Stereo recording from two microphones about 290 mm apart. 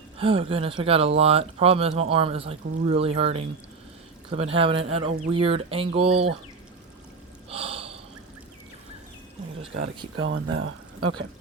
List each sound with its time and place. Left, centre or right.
0.2 s speech: centre
7.5 s snort: centre
10.2 s speech: right